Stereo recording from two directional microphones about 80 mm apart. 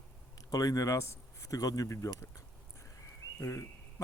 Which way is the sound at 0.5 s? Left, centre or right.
Left.